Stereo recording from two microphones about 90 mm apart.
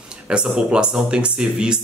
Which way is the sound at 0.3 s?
10° right (ahead or behind).